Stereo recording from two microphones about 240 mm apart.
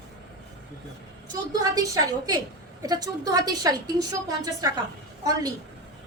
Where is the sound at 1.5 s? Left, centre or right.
Centre.